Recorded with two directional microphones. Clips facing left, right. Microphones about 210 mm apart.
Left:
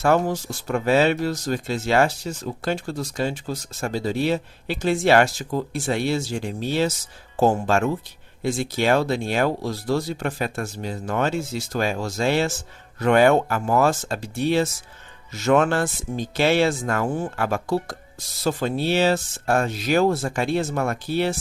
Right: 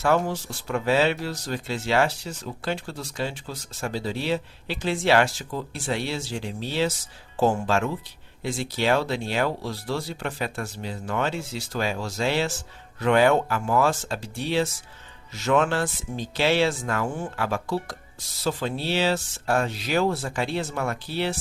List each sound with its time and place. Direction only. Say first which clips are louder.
0.3 s speech: left 4 dB; 45° left (ahead or behind)